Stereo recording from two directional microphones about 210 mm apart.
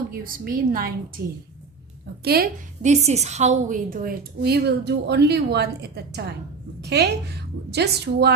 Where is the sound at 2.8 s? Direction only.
35° right (ahead or behind).